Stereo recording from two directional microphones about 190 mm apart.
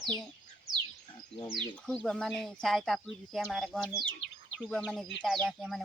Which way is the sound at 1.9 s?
5° left (ahead or behind).